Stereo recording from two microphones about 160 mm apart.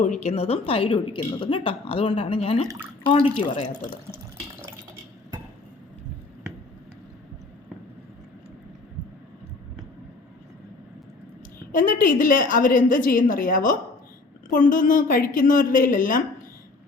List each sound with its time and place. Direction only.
0.0 s speech: 45° left (ahead or behind)
2.6 s speech: 15° right (ahead or behind)
3.1 s speech: 30° left (ahead or behind)
11.7 s a woman's voice: 60° left (ahead or behind)